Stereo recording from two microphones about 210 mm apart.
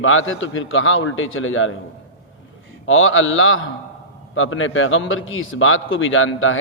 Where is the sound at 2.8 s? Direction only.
70° left (ahead or behind).